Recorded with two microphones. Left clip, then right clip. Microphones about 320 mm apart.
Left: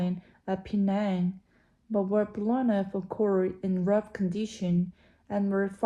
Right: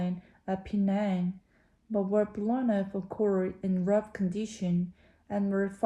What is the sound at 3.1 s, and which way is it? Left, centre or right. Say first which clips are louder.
Speech: left 1 dB; left.